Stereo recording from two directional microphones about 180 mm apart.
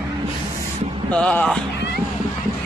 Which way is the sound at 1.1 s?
5° left (ahead or behind).